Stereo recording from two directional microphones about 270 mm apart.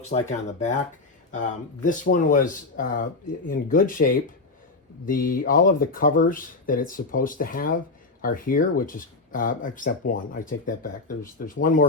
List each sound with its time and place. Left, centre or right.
0.1 s speech: left
1.8 s speech: left